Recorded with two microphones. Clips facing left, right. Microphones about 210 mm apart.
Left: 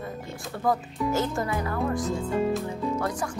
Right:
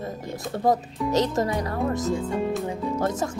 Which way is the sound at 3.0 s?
25° right (ahead or behind).